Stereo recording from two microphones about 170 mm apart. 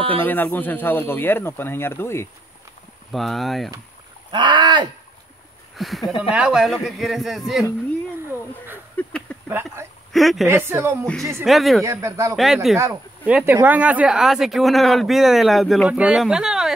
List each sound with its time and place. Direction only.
0.1 s speech: 10° left (ahead or behind)
3.1 s speech: centre (ahead or behind)
4.3 s speech: 30° right (ahead or behind)
5.8 s speech: centre (ahead or behind)
8.9 s a sound: 5° left (ahead or behind)
9.5 s speech: 15° right (ahead or behind)
10.1 s speech: centre (ahead or behind)
10.4 s speech: 15° right (ahead or behind)
11.4 s speech: centre (ahead or behind)
11.8 s speech: 20° right (ahead or behind); by 16.7 s 5° right (ahead or behind)